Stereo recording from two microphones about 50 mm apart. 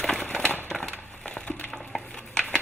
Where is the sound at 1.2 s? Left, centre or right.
Left.